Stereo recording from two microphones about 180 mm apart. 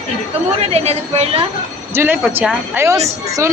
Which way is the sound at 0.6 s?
35° right (ahead or behind).